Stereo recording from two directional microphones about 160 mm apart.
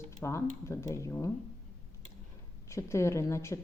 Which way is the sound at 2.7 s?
15° left (ahead or behind).